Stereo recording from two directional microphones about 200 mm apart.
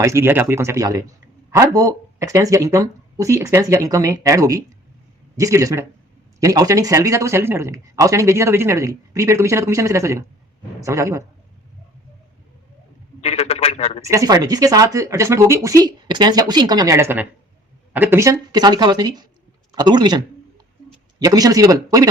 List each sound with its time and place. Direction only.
0.0 s a man's voice: 15° right (ahead or behind)
13.2 s a man's voice: 30° left (ahead or behind)
14.1 s a woman's voice: 20° right (ahead or behind)
21.2 s speech: 20° right (ahead or behind)